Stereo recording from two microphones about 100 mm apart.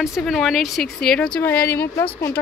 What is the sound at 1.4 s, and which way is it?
Speech, 20° left (ahead or behind).